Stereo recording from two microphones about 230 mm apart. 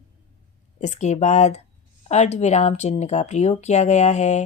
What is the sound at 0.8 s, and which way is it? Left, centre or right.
Speech, left.